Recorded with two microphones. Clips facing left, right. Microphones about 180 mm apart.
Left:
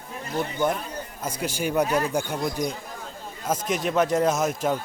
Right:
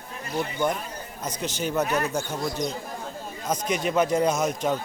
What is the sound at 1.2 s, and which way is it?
Speech, 10° left (ahead or behind).